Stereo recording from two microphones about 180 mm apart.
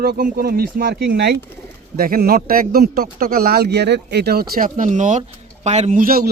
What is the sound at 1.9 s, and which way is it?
Speech, 55° right (ahead or behind).